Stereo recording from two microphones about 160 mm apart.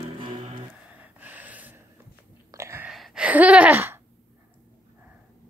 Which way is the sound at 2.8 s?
5° right (ahead or behind).